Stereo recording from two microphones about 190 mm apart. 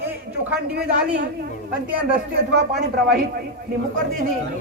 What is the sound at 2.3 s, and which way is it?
Speech, 60° right (ahead or behind).